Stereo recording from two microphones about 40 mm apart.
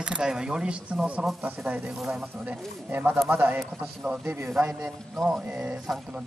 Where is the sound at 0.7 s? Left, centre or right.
Right.